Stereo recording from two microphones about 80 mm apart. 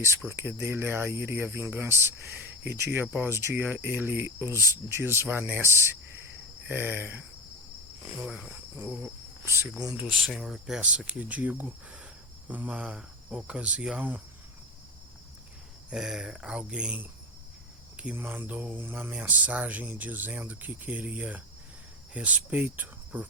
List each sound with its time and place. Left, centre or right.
0.0 s speech: right
8.3 s speech: centre
8.7 s cricket: centre
10.0 s speech: centre
15.9 s speech: centre
17.9 s cricket: centre
18.2 s speech: right